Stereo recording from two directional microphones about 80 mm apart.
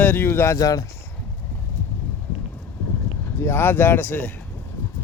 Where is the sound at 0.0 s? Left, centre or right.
Left.